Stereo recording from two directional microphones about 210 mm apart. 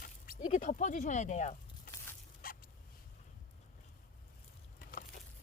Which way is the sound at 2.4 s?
45° left (ahead or behind).